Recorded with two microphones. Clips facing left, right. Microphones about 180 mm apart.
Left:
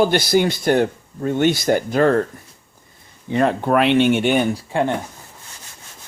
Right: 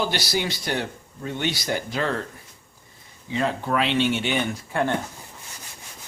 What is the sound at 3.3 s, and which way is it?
Speech, 55° left (ahead or behind).